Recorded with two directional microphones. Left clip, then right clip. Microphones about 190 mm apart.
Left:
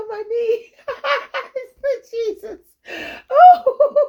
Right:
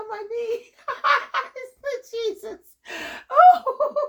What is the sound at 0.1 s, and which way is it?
Giggle, 35° left (ahead or behind).